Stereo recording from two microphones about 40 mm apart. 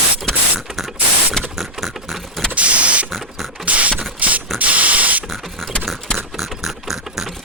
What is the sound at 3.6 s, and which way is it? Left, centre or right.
Beatboxing, right.